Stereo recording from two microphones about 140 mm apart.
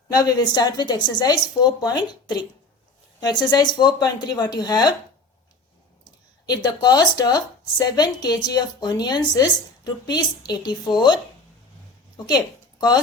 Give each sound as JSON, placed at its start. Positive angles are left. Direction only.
{"t": 0.1, "sound": "a woman's voice", "side_deg": 30}
{"t": 6.4, "sound": "a woman's voice", "side_deg": 30}